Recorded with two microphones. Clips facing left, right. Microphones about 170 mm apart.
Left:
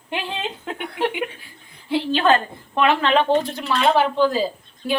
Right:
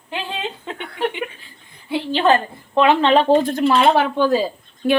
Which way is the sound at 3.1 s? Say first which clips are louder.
Right 4 dB; 45° right (ahead or behind).